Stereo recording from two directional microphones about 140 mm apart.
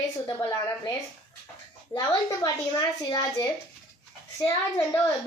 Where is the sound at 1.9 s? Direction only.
30° left (ahead or behind).